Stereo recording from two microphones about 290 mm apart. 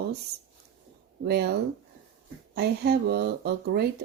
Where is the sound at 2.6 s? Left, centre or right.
Right.